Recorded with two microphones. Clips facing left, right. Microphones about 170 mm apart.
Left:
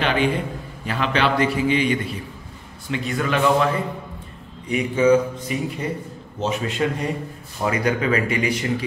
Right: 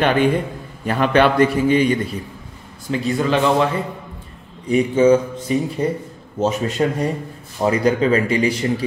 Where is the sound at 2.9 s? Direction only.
30° right (ahead or behind).